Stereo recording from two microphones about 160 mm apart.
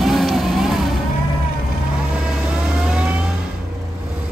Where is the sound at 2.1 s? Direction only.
5° right (ahead or behind).